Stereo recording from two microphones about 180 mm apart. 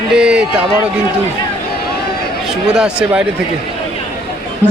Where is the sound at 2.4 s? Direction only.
5° right (ahead or behind).